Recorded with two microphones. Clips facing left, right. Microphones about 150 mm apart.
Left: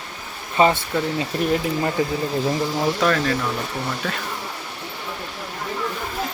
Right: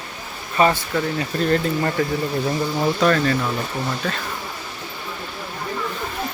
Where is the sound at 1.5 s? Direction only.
5° left (ahead or behind).